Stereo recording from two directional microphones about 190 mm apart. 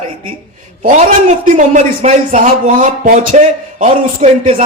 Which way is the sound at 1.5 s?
40° right (ahead or behind).